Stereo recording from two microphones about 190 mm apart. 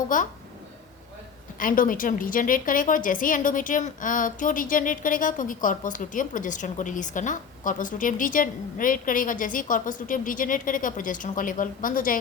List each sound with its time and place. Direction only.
0.1 s a woman's voice: 45° left (ahead or behind)
1.5 s a woman's voice: 45° left (ahead or behind)